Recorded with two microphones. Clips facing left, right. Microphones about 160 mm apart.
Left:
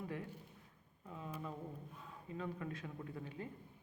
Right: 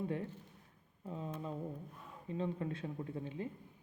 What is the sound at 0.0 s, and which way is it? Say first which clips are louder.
Speech: right 6 dB; 30° right (ahead or behind).